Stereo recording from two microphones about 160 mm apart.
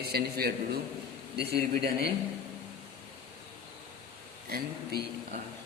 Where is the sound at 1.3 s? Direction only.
90° right.